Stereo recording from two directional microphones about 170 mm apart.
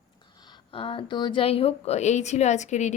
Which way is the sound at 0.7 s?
30° left (ahead or behind).